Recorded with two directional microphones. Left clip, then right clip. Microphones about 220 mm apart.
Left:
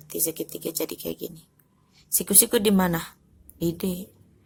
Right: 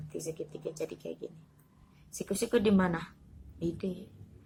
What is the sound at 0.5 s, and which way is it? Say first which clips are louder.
A woman's voice: left 7 dB; 50° left (ahead or behind).